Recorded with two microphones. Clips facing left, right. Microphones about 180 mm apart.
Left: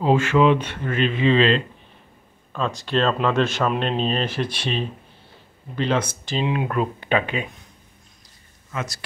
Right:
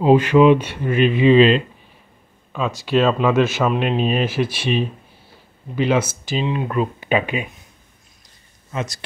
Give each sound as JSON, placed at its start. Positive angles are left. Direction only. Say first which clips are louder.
{"t": 0.0, "sound": "speech", "louder": "right 5 dB", "side_deg": -15}
{"t": 8.7, "sound": "speech", "louder": "right 3 dB", "side_deg": -20}